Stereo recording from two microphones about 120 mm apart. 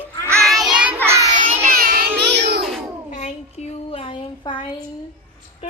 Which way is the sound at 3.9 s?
50° left (ahead or behind).